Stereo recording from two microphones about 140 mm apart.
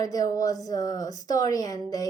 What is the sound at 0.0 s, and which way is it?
A woman's voice, 25° left (ahead or behind).